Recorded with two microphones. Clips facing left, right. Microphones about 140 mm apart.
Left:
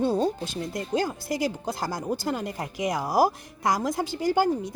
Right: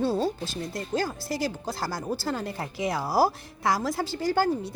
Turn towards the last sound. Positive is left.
turn(degrees=15)  # may be behind; listen again after turning